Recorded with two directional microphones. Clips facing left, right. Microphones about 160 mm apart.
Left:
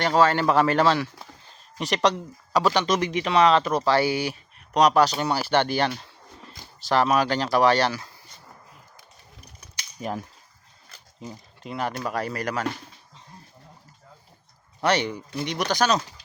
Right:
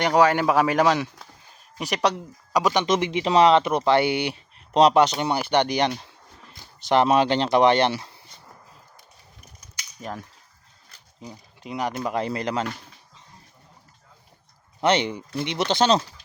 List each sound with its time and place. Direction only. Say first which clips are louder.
0.0 s speech: right 1 dB; 15° right (ahead or behind)
10.0 s speech: left 4 dB; 10° left (ahead or behind)
11.2 s a sound: left 1 dB; centre (ahead or behind)
11.7 s speech: right 2 dB; 15° right (ahead or behind)
14.8 s speech: right 2 dB; 20° right (ahead or behind)